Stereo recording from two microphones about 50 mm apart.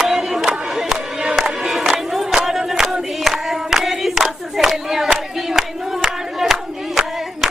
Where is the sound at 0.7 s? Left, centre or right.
Centre.